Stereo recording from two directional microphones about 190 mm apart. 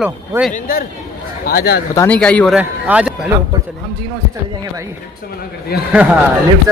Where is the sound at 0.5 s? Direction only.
50° left (ahead or behind).